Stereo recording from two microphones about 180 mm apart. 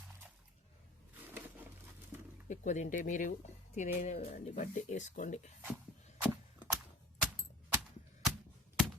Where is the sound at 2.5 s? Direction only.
40° left (ahead or behind).